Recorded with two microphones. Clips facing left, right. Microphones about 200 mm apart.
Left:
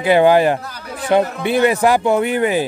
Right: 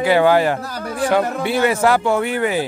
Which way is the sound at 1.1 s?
20° left (ahead or behind).